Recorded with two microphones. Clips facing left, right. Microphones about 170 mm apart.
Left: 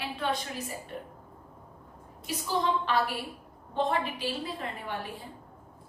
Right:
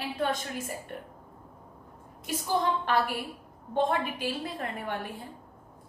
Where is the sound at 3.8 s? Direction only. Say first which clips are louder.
Right 1 dB; 50° right (ahead or behind).